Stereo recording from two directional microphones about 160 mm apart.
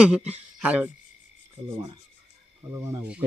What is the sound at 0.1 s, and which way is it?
Speech, 5° right (ahead or behind).